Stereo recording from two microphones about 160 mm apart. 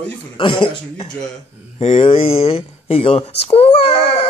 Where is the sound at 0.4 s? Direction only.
30° left (ahead or behind).